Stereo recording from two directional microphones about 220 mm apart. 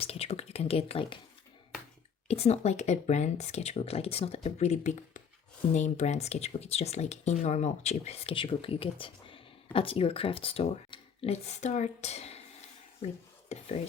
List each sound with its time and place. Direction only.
0.0 s speech: 25° left (ahead or behind)
2.2 s speech: 30° left (ahead or behind)
13.5 s a sound: 30° left (ahead or behind)